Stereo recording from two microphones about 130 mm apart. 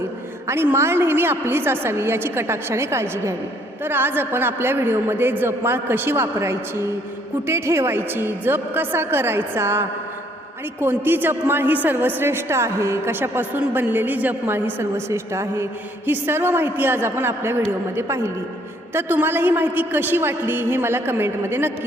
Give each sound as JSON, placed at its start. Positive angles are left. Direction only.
{"t": 0.4, "sound": "a woman's voice", "side_deg": -20}